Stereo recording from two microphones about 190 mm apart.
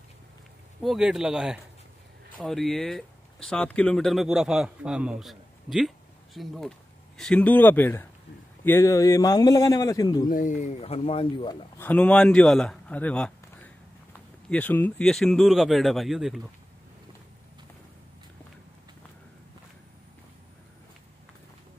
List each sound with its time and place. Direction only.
0.8 s a man's voice: 5° right (ahead or behind); by 10.2 s 20° left (ahead or behind)
10.2 s speech: 45° left (ahead or behind); by 11.5 s 25° left (ahead or behind)
11.8 s speech: 5° left (ahead or behind)